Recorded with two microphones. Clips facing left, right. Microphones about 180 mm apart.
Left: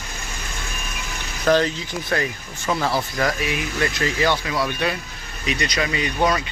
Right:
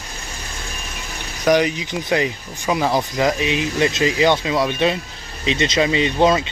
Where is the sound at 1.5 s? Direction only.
15° right (ahead or behind).